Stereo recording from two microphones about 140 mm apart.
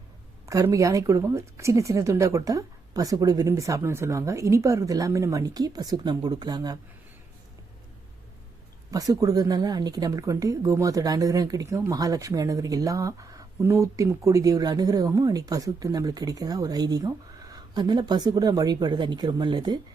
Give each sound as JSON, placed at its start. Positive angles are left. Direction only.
{"t": 0.4, "sound": "speech", "side_deg": -20}
{"t": 8.9, "sound": "speech", "side_deg": -25}